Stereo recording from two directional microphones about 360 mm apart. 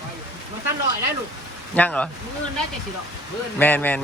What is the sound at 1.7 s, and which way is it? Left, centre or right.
Speech, centre.